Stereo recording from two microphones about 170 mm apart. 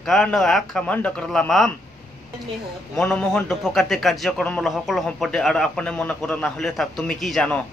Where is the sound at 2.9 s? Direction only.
5° left (ahead or behind).